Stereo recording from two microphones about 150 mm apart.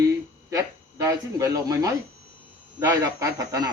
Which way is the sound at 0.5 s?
20° right (ahead or behind).